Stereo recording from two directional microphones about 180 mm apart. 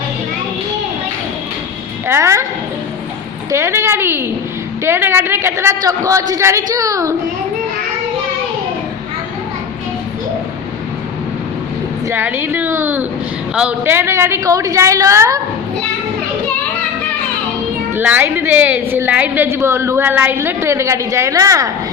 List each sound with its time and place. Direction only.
2.0 s a woman's voice: 15° right (ahead or behind)
3.5 s a woman's voice: 15° right (ahead or behind)
12.0 s a woman's voice: 10° right (ahead or behind)
17.9 s a woman's voice: 10° right (ahead or behind)